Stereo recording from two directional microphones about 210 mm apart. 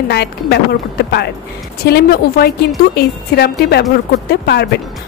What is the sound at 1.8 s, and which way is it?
A woman's voice, 50° left (ahead or behind).